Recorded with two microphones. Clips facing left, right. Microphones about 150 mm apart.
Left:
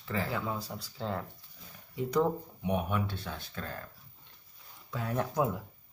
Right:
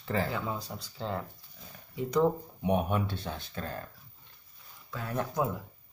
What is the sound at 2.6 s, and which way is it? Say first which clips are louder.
Speech: right 4 dB; 35° right (ahead or behind).